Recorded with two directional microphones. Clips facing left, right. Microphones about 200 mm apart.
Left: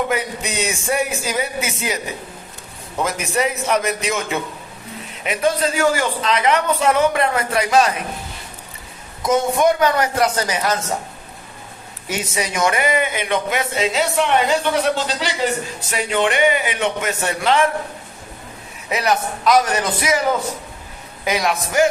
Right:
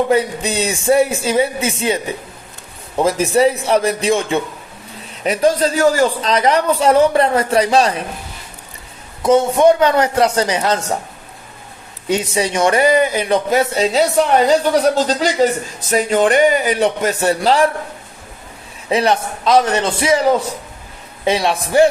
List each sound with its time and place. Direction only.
0.1 s a man's voice: 30° right (ahead or behind)
3.0 s a man's voice: 30° right (ahead or behind)
9.2 s speech: 30° right (ahead or behind)
12.0 s a man's voice: 25° right (ahead or behind)
18.9 s a man's voice: 30° right (ahead or behind)